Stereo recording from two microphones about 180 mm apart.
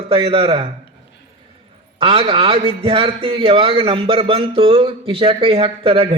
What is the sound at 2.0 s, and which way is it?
A man's voice, 30° right (ahead or behind).